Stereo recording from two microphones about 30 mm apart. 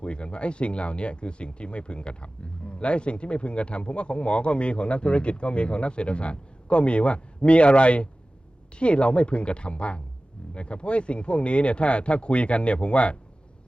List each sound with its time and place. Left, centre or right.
0.0 s speech: left